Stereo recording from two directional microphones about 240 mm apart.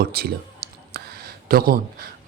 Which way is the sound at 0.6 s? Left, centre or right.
Right.